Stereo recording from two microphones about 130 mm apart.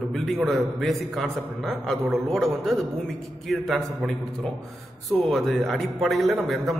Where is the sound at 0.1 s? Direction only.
Centre (ahead or behind).